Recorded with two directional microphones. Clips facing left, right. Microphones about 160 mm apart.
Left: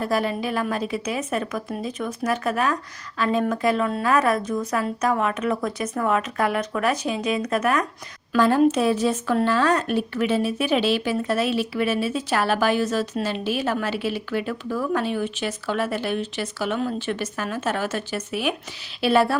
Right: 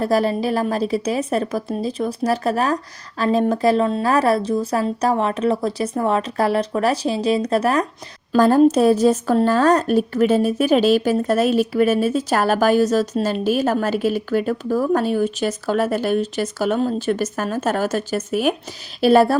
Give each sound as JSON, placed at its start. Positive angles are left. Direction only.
{"t": 0.0, "sound": "speech", "side_deg": -35}